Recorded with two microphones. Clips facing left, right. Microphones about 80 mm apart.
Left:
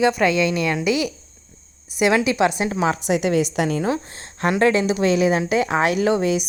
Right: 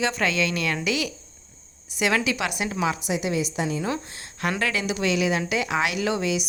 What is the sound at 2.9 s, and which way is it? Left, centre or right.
Speech, left.